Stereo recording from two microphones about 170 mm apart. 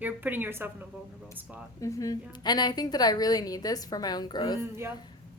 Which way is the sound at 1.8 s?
20° left (ahead or behind).